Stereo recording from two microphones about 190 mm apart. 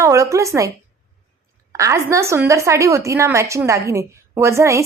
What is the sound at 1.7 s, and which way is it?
A woman's voice, 15° right (ahead or behind).